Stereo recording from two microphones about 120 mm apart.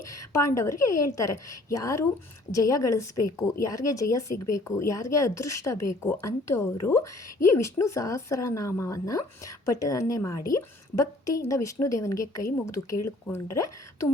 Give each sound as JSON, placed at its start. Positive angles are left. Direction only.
{"t": 0.0, "sound": "a woman's voice", "side_deg": 25}